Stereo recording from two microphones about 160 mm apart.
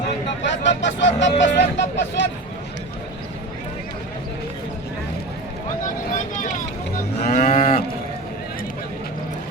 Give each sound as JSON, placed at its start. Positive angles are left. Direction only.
{"t": 0.6, "sound": "speech", "side_deg": 90}
{"t": 5.8, "sound": "vehicle", "side_deg": 55}
{"t": 7.2, "sound": "moo", "side_deg": 70}